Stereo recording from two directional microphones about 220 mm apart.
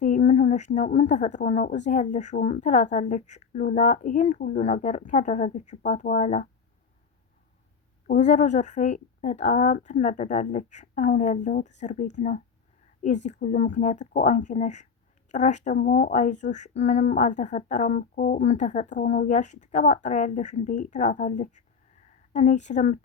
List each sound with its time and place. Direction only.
0.0 s a woman's voice: 30° left (ahead or behind)
8.0 s a woman's voice: 30° left (ahead or behind)